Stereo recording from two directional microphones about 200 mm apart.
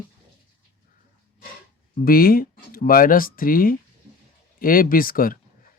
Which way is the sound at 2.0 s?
45° left (ahead or behind).